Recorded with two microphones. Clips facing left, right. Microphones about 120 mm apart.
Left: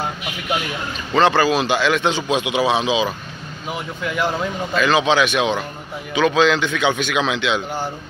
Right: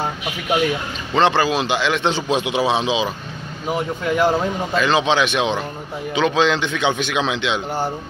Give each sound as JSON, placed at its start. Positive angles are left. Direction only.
{"t": 1.1, "sound": "a man's voice", "side_deg": -20}
{"t": 3.6, "sound": "speech", "side_deg": -40}
{"t": 4.7, "sound": "a man's voice", "side_deg": -25}